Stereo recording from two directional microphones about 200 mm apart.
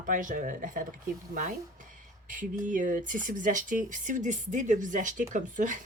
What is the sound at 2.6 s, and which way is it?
Speech, 40° right (ahead or behind).